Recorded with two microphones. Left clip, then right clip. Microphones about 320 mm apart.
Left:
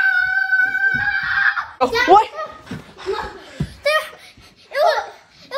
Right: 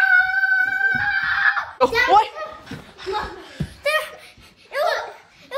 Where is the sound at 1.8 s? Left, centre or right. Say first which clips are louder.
Left 3 dB; centre.